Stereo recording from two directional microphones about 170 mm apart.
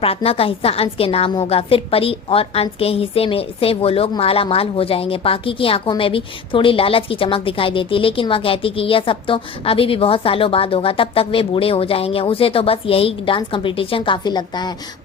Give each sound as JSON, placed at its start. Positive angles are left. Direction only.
{"t": 0.0, "sound": "a woman's voice", "side_deg": 35}